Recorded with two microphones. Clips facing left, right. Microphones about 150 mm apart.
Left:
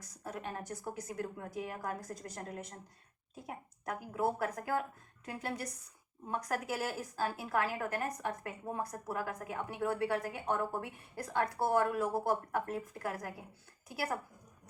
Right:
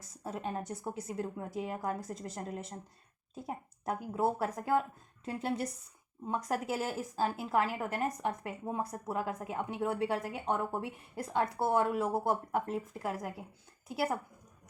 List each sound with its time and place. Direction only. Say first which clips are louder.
0.0 s a woman's voice: right 4 dB; 25° right (ahead or behind)